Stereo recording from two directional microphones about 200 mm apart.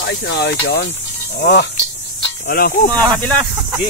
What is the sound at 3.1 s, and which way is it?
Speech, 5° left (ahead or behind).